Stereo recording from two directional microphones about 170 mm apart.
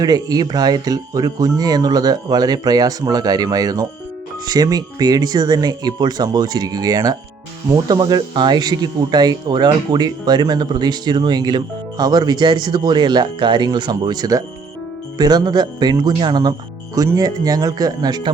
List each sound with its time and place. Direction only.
0.0 s speech: 25° right (ahead or behind)